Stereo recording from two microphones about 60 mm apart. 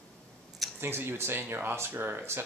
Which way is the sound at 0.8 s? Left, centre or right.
Right.